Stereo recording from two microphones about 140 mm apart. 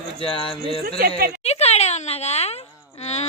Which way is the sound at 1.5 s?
50° left (ahead or behind).